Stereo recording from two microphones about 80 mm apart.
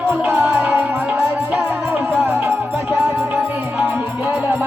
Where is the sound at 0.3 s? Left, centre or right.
Right.